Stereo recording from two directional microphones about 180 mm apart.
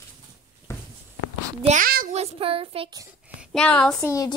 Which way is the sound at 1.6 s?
50° right (ahead or behind).